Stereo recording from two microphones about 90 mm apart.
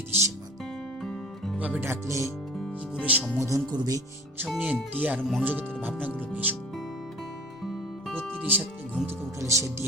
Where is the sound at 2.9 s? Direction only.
15° right (ahead or behind).